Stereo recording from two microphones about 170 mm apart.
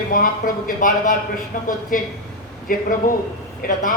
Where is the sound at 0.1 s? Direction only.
55° left (ahead or behind).